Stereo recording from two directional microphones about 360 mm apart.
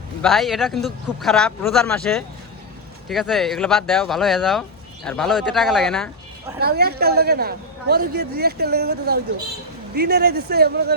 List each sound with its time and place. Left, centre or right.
0.2 s speech: centre
6.6 s speech: right